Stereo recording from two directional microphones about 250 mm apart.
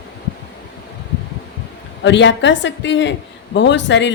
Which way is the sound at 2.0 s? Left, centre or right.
Left.